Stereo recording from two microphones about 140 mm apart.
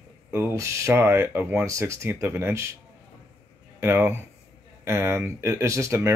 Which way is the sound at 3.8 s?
15° right (ahead or behind).